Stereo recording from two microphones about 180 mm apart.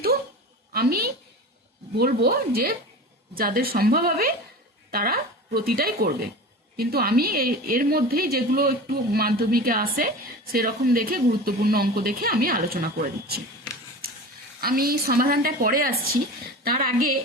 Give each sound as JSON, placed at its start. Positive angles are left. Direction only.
{"t": 0.7, "sound": "a woman's voice", "side_deg": -55}
{"t": 14.6, "sound": "a woman's voice", "side_deg": -55}